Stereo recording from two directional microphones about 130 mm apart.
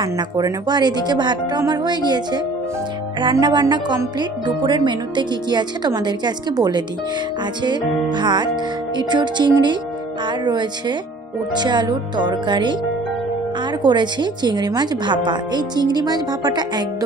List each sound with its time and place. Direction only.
0.0 s speech: 30° right (ahead or behind)
13.8 s speech: 35° right (ahead or behind)